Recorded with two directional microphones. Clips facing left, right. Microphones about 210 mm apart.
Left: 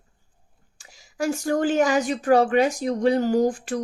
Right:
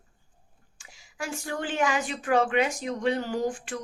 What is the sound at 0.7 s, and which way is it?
Speech, 40° left (ahead or behind).